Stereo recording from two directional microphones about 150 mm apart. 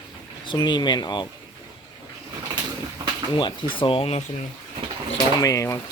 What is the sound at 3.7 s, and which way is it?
Speech, 35° left (ahead or behind).